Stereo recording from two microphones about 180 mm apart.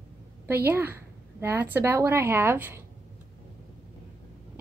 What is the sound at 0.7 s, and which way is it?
A woman's voice, 15° right (ahead or behind).